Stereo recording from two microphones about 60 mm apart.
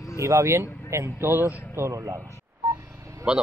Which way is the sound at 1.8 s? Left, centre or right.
Right.